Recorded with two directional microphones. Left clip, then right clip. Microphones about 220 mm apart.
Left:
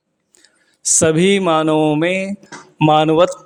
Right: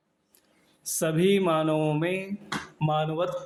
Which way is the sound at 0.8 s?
45° left (ahead or behind).